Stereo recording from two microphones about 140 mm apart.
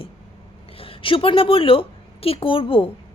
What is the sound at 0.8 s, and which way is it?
A woman's voice, 40° left (ahead or behind).